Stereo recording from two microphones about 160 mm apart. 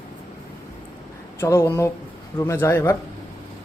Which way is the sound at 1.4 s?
20° left (ahead or behind).